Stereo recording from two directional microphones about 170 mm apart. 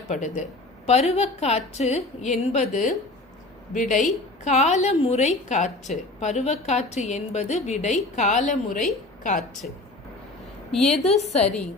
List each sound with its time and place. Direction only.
0.1 s a woman's voice: 45° left (ahead or behind)
10.7 s a woman's voice: 5° left (ahead or behind)
11.0 s a woman's voice: 40° left (ahead or behind)